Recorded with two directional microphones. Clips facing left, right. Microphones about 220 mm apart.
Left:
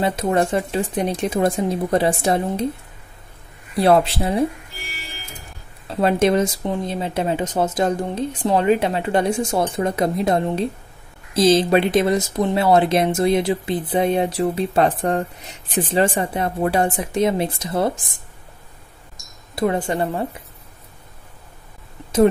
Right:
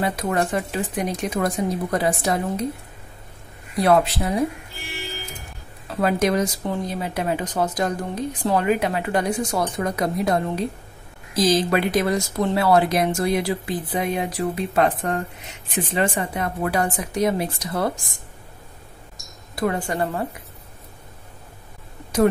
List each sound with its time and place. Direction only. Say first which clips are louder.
0.0 s speech: left 4 dB; 25° left (ahead or behind)
3.7 s speech: left 2 dB; 30° left (ahead or behind)
5.9 s speech: left 3 dB; 25° left (ahead or behind)
19.5 s speech: left 3 dB; 25° left (ahead or behind)